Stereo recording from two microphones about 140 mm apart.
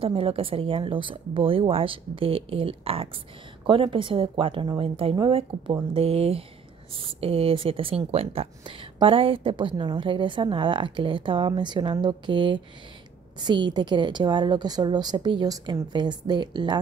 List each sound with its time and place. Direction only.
0.0 s speech: 40° right (ahead or behind)